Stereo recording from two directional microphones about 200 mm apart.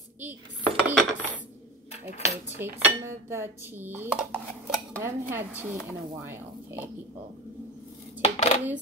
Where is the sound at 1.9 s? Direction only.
35° left (ahead or behind).